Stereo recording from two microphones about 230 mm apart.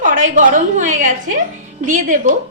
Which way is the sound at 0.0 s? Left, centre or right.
Right.